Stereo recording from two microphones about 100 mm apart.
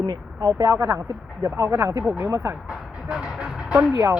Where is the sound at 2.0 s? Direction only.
10° right (ahead or behind).